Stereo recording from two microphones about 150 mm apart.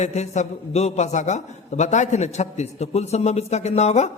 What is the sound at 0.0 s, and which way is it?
A man's voice, 50° left (ahead or behind).